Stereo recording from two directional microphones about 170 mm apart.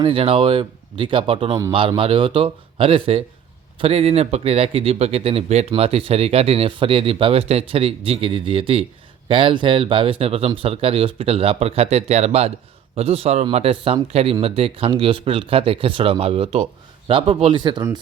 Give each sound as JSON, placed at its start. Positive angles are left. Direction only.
{"t": 0.0, "sound": "speech", "side_deg": -30}